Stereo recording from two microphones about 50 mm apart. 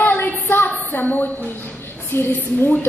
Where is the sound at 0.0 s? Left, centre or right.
Left.